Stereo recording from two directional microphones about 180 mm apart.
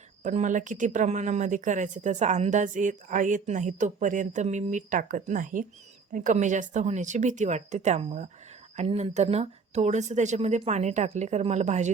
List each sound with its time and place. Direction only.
0.2 s speech: 45° right (ahead or behind)